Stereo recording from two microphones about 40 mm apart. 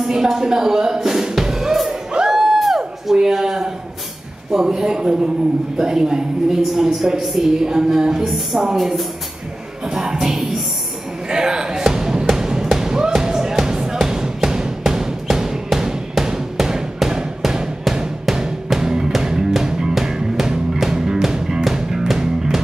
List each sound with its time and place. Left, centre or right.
0.0 s music: centre
3.1 s a sound: centre
4.5 s a woman's voice: centre
9.8 s music: centre